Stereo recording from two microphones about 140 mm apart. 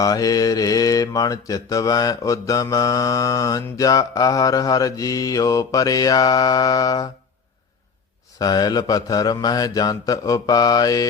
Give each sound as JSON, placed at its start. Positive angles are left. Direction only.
{"t": 0.0, "sound": "mantra", "side_deg": 25}
{"t": 8.4, "sound": "mantra", "side_deg": 30}